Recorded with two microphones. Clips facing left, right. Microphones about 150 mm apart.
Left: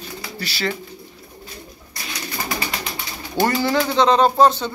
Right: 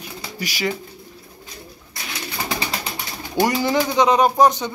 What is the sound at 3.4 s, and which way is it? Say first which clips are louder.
Speech: even; 15° right (ahead or behind).